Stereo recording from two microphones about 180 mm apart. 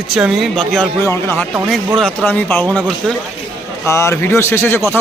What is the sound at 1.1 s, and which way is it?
Speech, 15° left (ahead or behind).